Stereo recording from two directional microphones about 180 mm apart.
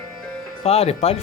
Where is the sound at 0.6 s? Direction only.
35° left (ahead or behind).